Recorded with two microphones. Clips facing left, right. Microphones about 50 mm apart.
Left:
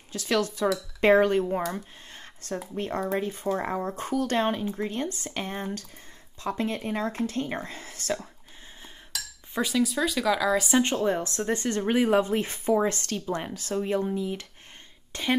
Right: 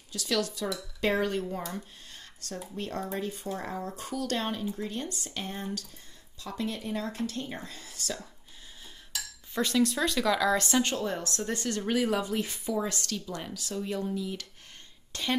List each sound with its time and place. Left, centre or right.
0.1 s speech: left
2.1 s a sound: left
2.8 s speech: left
9.5 s speech: centre
10.8 s speech: left